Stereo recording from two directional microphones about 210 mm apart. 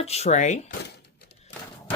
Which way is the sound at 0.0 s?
30° left (ahead or behind).